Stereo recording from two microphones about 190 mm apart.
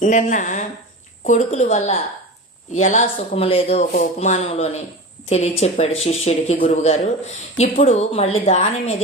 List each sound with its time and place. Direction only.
0.0 s a woman's voice: 40° left (ahead or behind)